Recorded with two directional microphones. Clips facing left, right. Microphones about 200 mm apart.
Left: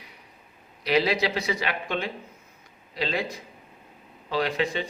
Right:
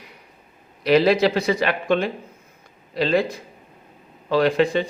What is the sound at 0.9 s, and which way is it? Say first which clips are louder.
A man's voice: right 7 dB; 55° right (ahead or behind).